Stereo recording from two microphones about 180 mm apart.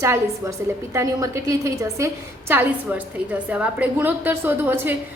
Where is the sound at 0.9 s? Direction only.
15° right (ahead or behind).